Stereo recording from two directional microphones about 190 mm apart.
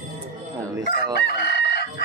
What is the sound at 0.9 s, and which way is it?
Chicken, 60° left (ahead or behind).